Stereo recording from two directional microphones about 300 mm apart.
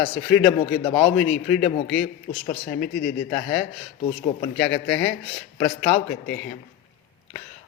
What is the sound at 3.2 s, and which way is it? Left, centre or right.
Speech, centre.